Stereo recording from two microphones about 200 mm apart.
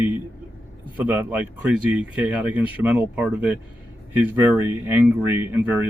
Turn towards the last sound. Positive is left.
turn(degrees=-10)  # may be behind; listen again after turning